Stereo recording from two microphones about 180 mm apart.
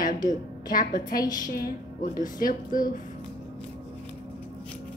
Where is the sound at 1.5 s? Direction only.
55° left (ahead or behind).